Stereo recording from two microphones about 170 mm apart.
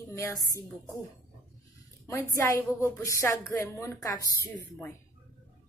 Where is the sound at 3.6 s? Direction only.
15° left (ahead or behind).